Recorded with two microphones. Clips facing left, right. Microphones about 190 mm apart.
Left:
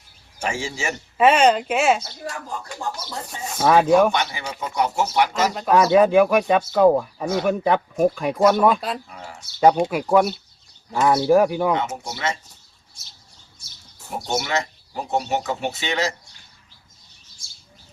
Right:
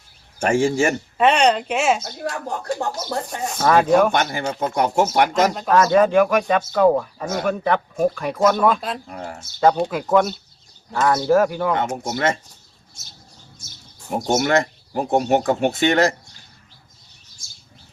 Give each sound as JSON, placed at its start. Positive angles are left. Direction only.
{"t": 0.3, "sound": "speech", "side_deg": -50}
{"t": 1.2, "sound": "a woman's voice", "side_deg": 0}
{"t": 2.0, "sound": "speech", "side_deg": -60}
{"t": 2.9, "sound": "speech", "side_deg": -50}
{"t": 3.5, "sound": "speech", "side_deg": 10}
{"t": 4.1, "sound": "speech", "side_deg": -50}
{"t": 5.7, "sound": "speech", "side_deg": 10}
{"t": 9.0, "sound": "speech", "side_deg": -50}
{"t": 9.6, "sound": "speech", "side_deg": 10}
{"t": 12.0, "sound": "speech", "side_deg": -50}
{"t": 14.2, "sound": "speech", "side_deg": -45}